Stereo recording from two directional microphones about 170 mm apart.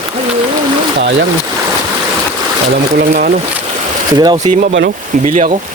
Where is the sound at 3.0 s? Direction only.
55° right (ahead or behind).